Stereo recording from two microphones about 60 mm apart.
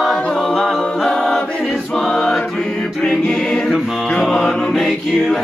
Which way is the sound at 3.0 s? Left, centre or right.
Centre.